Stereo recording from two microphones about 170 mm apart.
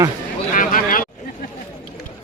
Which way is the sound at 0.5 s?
55° left (ahead or behind).